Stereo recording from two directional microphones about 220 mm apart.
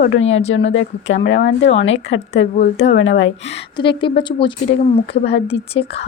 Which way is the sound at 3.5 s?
20° left (ahead or behind).